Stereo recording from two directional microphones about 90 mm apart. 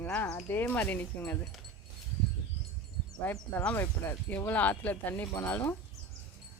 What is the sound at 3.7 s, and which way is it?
Speech, 25° left (ahead or behind).